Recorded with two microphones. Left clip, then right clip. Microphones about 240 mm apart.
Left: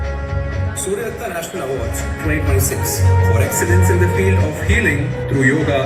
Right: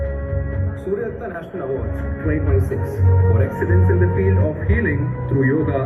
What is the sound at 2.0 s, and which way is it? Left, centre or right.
Speech, left.